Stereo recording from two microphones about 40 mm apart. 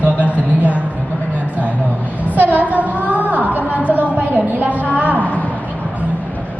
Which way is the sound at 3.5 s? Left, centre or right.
Right.